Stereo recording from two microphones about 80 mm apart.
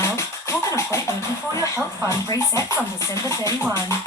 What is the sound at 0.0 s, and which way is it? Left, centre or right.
Music, left.